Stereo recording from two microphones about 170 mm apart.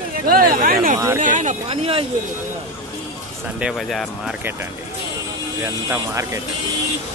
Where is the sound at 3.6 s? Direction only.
Centre (ahead or behind).